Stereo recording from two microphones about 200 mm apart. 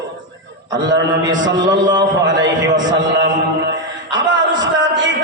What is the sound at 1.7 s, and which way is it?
A man's voice, 20° right (ahead or behind).